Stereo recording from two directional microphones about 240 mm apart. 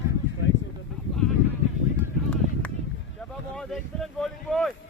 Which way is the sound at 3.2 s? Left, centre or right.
Centre.